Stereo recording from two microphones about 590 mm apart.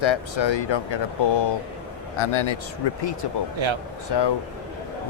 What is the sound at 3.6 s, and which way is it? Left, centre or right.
Speech, right.